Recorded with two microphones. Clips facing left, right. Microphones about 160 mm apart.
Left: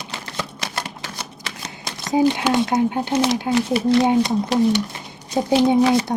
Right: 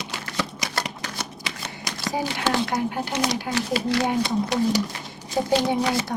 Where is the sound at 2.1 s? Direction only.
20° left (ahead or behind).